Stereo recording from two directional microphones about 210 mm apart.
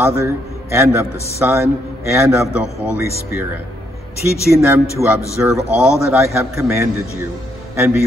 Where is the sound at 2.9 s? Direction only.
50° left (ahead or behind).